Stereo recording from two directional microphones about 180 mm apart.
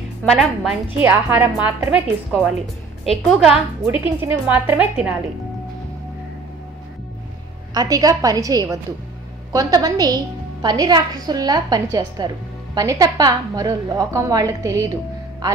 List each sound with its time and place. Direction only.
0.2 s a woman's voice: centre (ahead or behind)
3.1 s a woman's voice: centre (ahead or behind)
3.8 s a woman's voice: 10° right (ahead or behind)
7.7 s a woman's voice: 20° right (ahead or behind)